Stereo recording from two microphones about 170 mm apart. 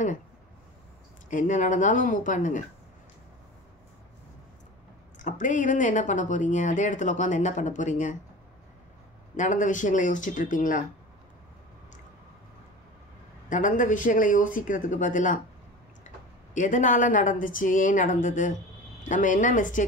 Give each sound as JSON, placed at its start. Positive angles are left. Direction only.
{"t": 1.3, "sound": "speech", "side_deg": 50}
{"t": 5.2, "sound": "speech", "side_deg": 50}
{"t": 9.4, "sound": "speech", "side_deg": 50}
{"t": 13.5, "sound": "speech", "side_deg": 50}
{"t": 16.5, "sound": "speech", "side_deg": 50}